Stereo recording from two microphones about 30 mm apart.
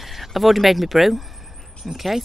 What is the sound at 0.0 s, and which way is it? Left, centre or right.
Speech, centre.